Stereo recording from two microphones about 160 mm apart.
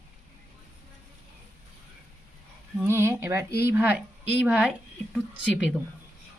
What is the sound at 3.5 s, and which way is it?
Speech, 80° left.